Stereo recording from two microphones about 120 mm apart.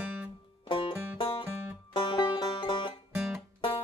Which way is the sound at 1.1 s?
50° left (ahead or behind).